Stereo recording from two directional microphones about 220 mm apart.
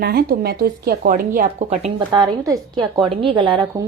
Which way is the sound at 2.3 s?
15° right (ahead or behind).